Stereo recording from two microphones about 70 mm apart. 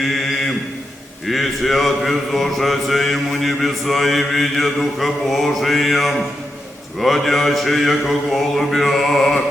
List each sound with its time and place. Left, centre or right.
0.0 s mantra: centre